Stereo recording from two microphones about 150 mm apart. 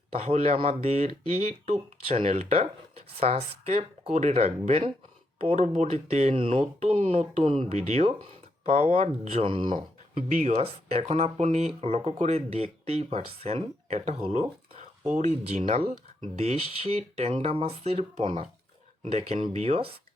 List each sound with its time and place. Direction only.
0.1 s speech: 45° right (ahead or behind)
10.2 s speech: 65° right (ahead or behind)
10.5 s speech: 45° right (ahead or behind)